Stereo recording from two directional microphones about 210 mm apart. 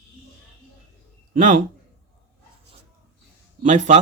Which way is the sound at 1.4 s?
35° right (ahead or behind).